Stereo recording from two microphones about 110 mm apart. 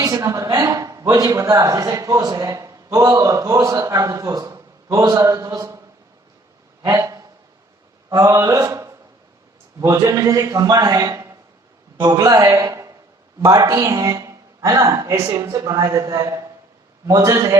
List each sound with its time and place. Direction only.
0.0 s speech: 30° right (ahead or behind)
6.8 s speech: 30° right (ahead or behind)
12.5 s a sound: 25° right (ahead or behind)
13.5 s speech: 35° right (ahead or behind)